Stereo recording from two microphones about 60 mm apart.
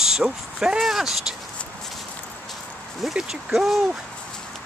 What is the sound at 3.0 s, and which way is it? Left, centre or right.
Speech, centre.